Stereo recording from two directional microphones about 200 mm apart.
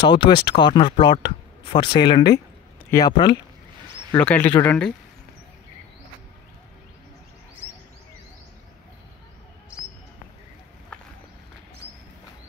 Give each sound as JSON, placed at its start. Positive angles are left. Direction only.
{"t": 0.0, "sound": "speech", "side_deg": 25}
{"t": 4.1, "sound": "speech", "side_deg": 10}